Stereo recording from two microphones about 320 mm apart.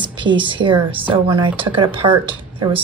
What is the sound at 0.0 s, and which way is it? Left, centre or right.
Speech, centre.